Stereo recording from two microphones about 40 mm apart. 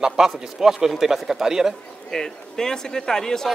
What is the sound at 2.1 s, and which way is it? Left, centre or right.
A man's voice, centre.